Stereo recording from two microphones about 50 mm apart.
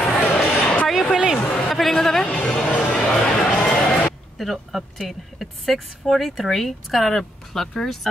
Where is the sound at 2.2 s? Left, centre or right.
Left.